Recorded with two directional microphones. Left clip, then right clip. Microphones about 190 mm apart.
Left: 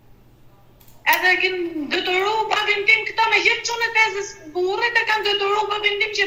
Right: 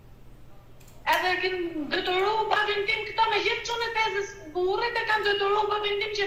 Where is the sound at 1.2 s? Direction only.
60° left (ahead or behind).